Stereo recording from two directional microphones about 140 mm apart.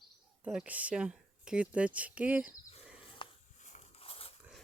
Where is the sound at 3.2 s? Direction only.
40° left (ahead or behind).